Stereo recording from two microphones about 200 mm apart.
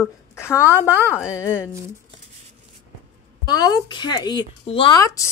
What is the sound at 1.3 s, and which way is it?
Speech, 15° left (ahead or behind).